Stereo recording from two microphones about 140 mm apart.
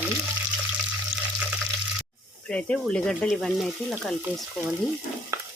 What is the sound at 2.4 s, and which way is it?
Speech, 5° left (ahead or behind).